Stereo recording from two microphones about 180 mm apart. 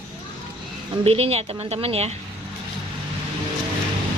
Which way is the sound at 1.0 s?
35° right (ahead or behind).